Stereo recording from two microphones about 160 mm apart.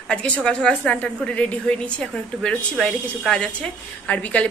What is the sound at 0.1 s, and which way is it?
A woman's voice, 5° left (ahead or behind).